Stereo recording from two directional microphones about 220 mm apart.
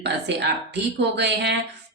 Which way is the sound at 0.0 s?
50° right (ahead or behind).